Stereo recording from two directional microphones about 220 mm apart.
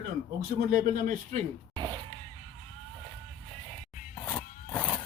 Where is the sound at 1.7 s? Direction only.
20° right (ahead or behind).